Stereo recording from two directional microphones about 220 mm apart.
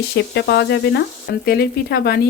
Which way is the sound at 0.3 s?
50° left (ahead or behind).